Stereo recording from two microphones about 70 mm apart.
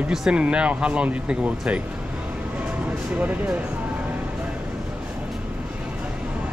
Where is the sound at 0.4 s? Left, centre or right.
Centre.